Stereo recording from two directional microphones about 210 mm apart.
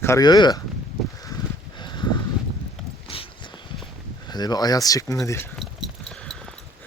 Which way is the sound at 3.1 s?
25° left (ahead or behind).